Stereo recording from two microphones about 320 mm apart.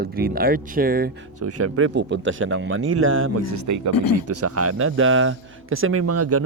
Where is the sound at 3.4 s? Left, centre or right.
Right.